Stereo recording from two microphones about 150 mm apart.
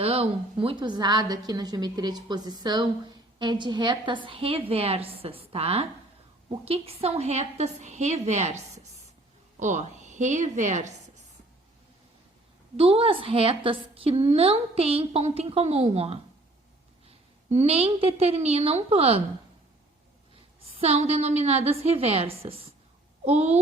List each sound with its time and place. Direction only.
0.0 s a woman's voice: 40° right (ahead or behind)
12.7 s a woman's voice: 40° right (ahead or behind)
20.7 s a woman's voice: 45° right (ahead or behind)